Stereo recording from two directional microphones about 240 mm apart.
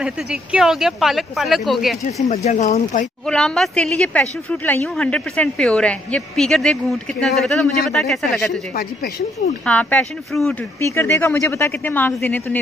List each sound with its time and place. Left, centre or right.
0.0 s a woman's voice: centre
2.2 s speech: left
3.3 s a woman's voice: centre
9.7 s a woman's voice: centre